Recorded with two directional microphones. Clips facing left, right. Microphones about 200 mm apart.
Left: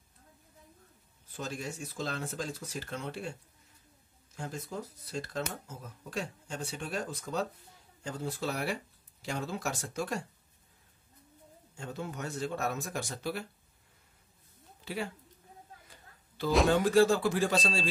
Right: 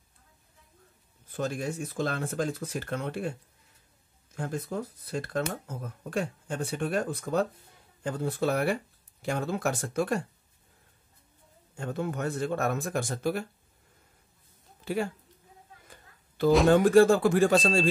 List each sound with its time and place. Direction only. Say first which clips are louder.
1.3 s speech: right 7 dB; 55° right (ahead or behind)
4.4 s speech: right 6 dB; 55° right (ahead or behind)
11.7 s speech: right 7 dB; 55° right (ahead or behind)
16.4 s speech: right 6 dB; 50° right (ahead or behind)